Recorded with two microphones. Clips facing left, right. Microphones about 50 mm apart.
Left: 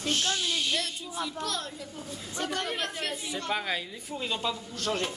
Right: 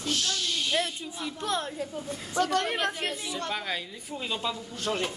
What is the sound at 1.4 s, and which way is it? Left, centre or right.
A woman's voice, right.